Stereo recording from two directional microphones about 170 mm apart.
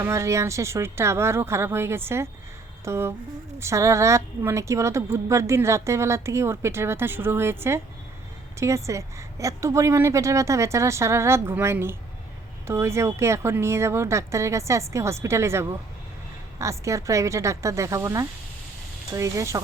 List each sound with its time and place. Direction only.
0.0 s speech: 15° right (ahead or behind)